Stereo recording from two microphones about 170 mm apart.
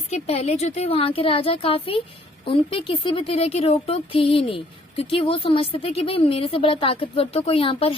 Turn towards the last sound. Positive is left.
turn(degrees=35)  # may be behind; listen again after turning